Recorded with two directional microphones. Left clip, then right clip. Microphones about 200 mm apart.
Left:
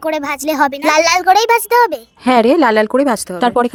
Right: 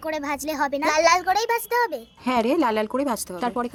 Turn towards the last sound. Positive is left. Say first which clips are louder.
# left 13 dB
turn(degrees=40)  # may be behind; listen again after turning